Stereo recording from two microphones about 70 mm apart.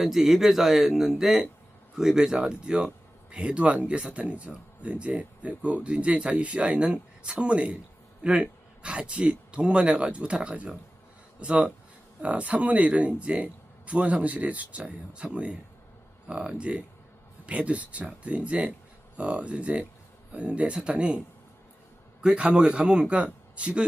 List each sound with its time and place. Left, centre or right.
0.0 s speech: centre
22.2 s speech: centre